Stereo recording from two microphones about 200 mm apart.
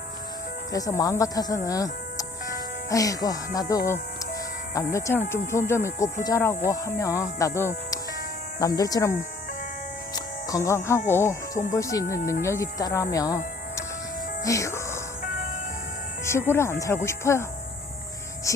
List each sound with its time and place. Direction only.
0.7 s speech: 15° left (ahead or behind)
10.2 s music: 15° left (ahead or behind)
11.1 s speech: 15° left (ahead or behind)
14.4 s music: 15° left (ahead or behind)
16.5 s speech: 15° left (ahead or behind)
18.5 s speech: 15° left (ahead or behind)